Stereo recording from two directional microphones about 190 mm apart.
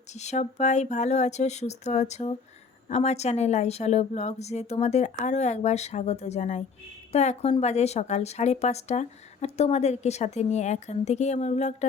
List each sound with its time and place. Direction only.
0.1 s a woman's voice: 35° left (ahead or behind)